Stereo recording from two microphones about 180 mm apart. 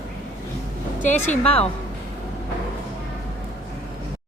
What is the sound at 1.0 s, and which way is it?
Speech, 40° left (ahead or behind).